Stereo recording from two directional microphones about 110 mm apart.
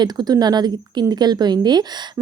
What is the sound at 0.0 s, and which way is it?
A woman's voice, 40° right (ahead or behind).